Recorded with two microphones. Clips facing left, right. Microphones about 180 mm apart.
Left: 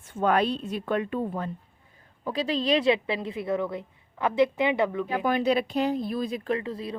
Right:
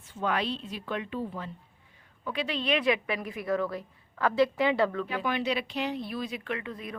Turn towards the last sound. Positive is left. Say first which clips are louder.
# left 6 dB
turn(degrees=30)  # may be behind; listen again after turning